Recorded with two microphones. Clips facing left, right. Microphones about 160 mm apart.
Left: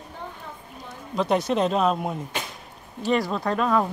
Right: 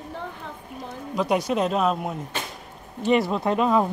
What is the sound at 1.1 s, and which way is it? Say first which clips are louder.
Speech: even; 10° right (ahead or behind).